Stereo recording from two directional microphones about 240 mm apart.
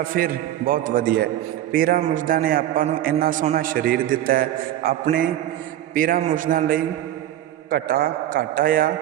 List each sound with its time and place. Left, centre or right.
0.1 s a man's voice: right